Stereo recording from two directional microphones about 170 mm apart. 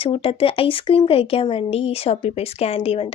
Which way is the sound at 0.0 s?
35° left (ahead or behind).